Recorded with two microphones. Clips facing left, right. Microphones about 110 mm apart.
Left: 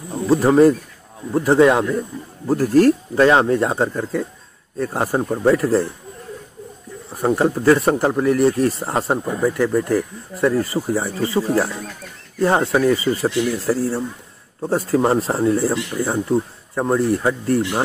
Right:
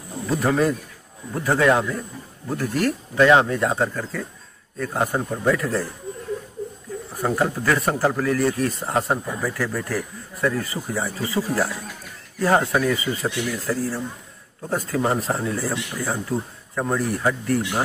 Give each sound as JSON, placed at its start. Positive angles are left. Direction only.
{"t": 0.3, "sound": "speech", "side_deg": 35}
{"t": 7.2, "sound": "speech", "side_deg": 25}